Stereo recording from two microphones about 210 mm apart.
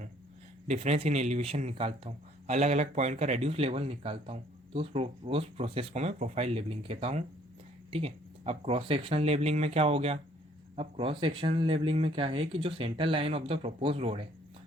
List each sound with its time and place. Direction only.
0.7 s speech: 30° right (ahead or behind)